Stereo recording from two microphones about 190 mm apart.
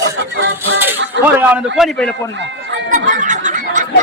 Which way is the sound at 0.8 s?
10° right (ahead or behind).